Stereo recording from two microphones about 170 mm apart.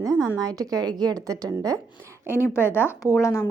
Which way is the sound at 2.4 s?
15° left (ahead or behind).